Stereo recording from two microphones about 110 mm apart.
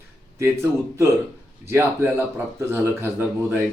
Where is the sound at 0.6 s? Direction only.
25° right (ahead or behind).